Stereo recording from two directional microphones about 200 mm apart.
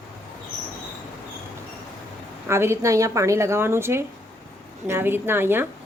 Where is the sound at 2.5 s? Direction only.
15° right (ahead or behind).